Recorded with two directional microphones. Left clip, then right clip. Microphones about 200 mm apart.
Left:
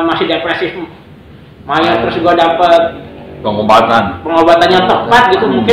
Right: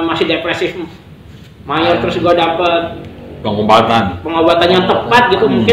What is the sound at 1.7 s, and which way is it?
A man's voice, 40° right (ahead or behind).